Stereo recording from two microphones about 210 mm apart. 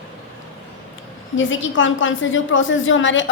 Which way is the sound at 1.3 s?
65° left (ahead or behind).